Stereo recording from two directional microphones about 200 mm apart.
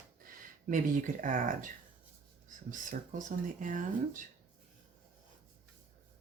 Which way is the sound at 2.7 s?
40° right (ahead or behind).